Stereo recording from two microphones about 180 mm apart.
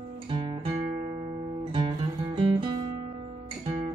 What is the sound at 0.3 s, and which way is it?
Music, 30° right (ahead or behind).